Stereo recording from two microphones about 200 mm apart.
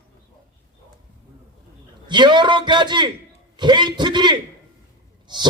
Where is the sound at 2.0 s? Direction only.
20° right (ahead or behind).